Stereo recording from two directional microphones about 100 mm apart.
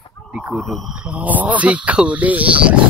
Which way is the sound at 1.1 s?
15° right (ahead or behind).